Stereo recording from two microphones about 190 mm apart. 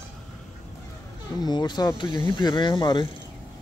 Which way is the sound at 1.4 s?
20° left (ahead or behind).